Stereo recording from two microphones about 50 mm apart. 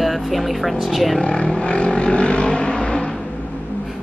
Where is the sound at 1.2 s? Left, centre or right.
Centre.